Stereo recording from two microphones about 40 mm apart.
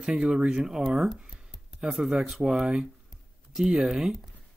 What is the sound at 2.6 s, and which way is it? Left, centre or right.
Speech, right.